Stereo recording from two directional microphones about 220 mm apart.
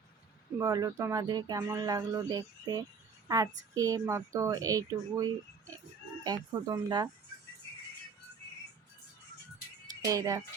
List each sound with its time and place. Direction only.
0.6 s speech: 15° right (ahead or behind)
10.1 s speech: 15° right (ahead or behind)